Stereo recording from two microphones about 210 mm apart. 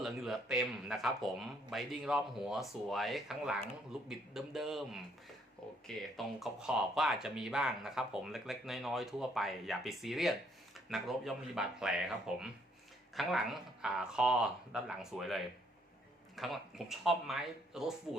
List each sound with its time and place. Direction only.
0.0 s speech: centre (ahead or behind)
6.0 s speech: centre (ahead or behind)